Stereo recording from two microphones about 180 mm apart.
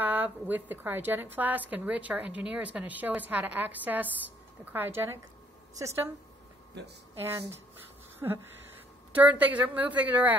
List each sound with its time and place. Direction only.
0.0 s a woman's voice: 10° right (ahead or behind)
6.8 s speech: 70° right (ahead or behind)
7.2 s a woman's voice: 15° right (ahead or behind)